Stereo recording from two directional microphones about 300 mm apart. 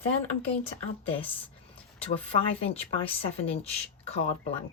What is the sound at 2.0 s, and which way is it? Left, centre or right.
Speech, centre.